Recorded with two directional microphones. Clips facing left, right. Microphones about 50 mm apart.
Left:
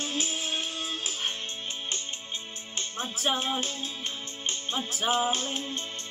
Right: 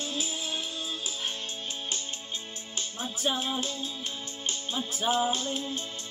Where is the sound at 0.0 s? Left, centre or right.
Left.